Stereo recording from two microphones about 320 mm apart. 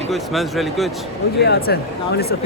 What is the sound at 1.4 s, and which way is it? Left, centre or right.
Speech, left.